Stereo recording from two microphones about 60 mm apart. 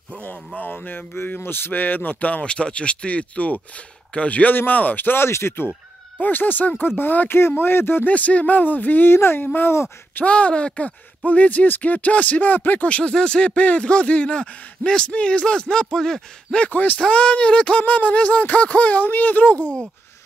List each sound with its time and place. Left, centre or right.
0.6 s speech: left
6.2 s speech: left
8.1 s speech: left
10.1 s speech: left
16.5 s speech: left
17.0 s speech: centre